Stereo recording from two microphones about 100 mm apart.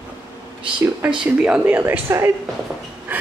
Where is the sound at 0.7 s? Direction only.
15° right (ahead or behind).